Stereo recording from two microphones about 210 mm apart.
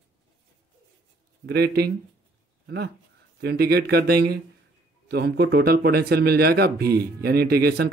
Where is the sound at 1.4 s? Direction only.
50° right (ahead or behind).